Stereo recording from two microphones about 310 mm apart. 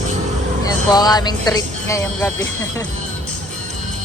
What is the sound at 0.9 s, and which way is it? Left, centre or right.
A woman's voice, centre.